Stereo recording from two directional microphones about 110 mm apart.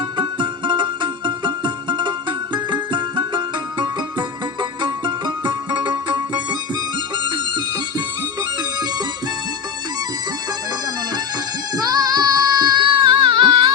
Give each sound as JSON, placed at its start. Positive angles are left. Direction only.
{"t": 0.2, "sound": "music", "side_deg": -45}
{"t": 11.8, "sound": "music", "side_deg": -35}